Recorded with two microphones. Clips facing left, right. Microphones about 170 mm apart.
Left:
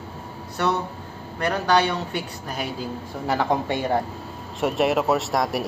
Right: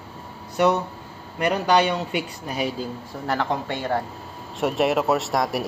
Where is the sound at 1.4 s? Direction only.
15° right (ahead or behind).